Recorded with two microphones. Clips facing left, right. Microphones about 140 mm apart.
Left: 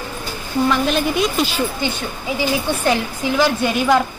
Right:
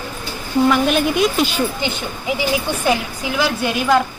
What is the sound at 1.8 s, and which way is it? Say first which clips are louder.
Speech: even; 20° right (ahead or behind).